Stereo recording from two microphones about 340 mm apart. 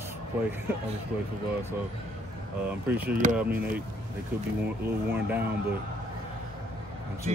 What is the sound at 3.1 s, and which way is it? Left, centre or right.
Speech, right.